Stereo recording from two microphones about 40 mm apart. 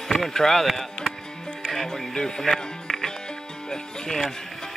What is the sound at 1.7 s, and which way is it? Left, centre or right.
Music, centre.